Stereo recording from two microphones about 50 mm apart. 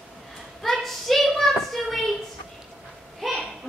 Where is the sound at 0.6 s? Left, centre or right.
Centre.